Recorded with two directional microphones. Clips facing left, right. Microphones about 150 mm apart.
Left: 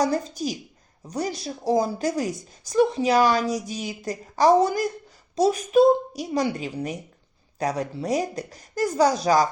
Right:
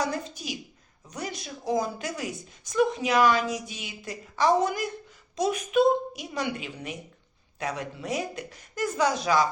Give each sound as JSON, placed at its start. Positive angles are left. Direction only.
{"t": 0.0, "sound": "a woman's voice", "side_deg": 40}